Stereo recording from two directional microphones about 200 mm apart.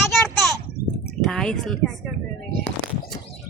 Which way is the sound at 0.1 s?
Centre (ahead or behind).